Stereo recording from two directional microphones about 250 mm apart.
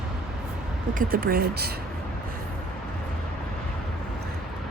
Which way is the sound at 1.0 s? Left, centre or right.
Right.